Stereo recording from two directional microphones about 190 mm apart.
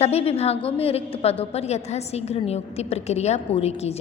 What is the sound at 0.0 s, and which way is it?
A woman's voice, 30° left (ahead or behind).